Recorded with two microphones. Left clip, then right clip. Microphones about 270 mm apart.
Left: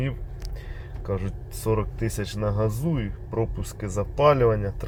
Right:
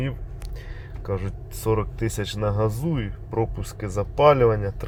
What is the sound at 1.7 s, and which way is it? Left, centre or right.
Speech, centre.